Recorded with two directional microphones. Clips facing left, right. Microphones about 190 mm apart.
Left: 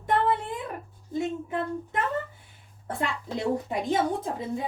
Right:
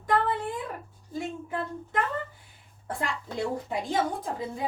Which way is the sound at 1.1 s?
20° left (ahead or behind).